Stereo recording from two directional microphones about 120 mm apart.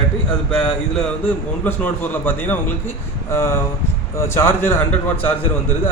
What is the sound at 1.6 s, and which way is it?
A man's voice, 15° left (ahead or behind).